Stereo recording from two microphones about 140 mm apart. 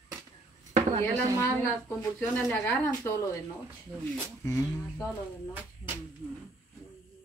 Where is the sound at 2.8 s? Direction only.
20° left (ahead or behind).